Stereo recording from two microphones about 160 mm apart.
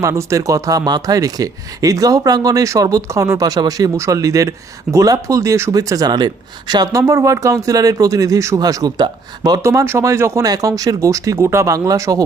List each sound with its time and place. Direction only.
0.0 s speech: 20° right (ahead or behind)